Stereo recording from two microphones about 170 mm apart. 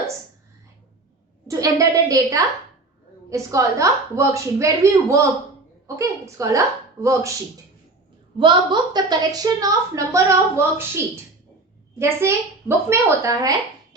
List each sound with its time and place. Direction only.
1.5 s a woman's voice: 20° right (ahead or behind)
8.4 s a woman's voice: 25° right (ahead or behind)